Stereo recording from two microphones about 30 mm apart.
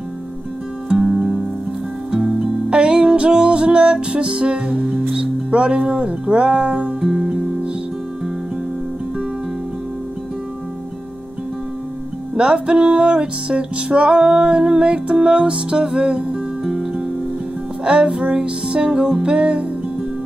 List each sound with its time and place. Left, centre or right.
1.0 s music: centre
2.0 s music: right
2.7 s music: right
5.1 s speech: right
7.0 s music: right
12.5 s music: right
16.6 s music: right
17.8 s music: right